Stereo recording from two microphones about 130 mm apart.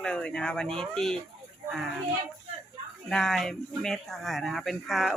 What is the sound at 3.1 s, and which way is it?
Speech, 5° left (ahead or behind).